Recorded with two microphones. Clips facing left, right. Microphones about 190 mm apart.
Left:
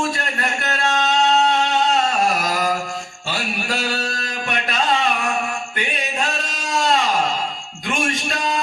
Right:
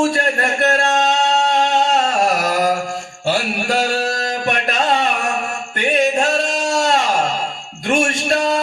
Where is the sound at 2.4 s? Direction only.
55° right (ahead or behind).